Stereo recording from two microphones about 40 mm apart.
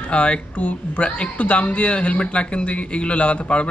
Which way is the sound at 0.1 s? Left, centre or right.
Left.